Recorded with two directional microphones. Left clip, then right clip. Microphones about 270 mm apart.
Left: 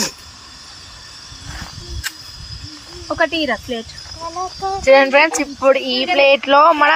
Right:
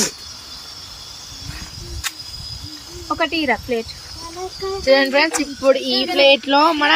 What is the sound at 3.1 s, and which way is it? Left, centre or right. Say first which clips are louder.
Speech: left 1 dB; centre.